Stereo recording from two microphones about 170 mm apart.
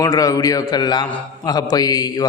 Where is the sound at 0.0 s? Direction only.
20° left (ahead or behind).